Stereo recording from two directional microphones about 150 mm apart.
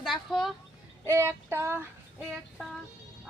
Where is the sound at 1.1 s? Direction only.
15° right (ahead or behind).